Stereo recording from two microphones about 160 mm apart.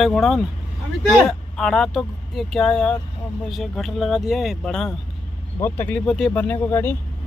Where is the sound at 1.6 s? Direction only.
5° left (ahead or behind).